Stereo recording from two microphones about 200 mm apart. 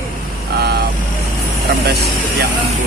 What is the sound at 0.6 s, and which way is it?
Vehicle, 55° right (ahead or behind).